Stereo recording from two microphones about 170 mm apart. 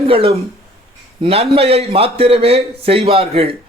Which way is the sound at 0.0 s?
35° right (ahead or behind).